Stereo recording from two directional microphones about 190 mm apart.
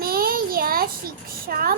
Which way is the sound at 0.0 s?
50° right (ahead or behind).